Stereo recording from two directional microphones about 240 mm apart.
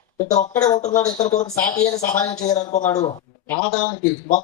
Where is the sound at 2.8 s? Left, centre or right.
Centre.